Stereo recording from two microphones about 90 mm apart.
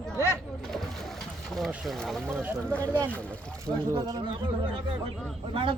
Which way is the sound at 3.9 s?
45° right (ahead or behind).